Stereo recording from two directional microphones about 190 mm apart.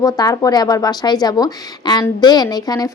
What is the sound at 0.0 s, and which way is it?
A woman's voice, 20° left (ahead or behind).